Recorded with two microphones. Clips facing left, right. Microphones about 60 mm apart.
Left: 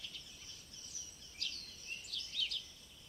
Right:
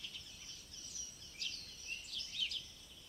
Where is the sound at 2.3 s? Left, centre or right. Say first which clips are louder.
Left 1 dB; centre.